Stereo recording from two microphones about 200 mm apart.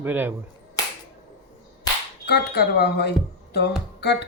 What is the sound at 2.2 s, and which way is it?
Speech, 55° left (ahead or behind).